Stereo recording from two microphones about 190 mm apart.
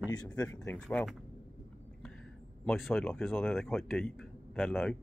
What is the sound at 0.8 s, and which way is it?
Speech, 5° left (ahead or behind).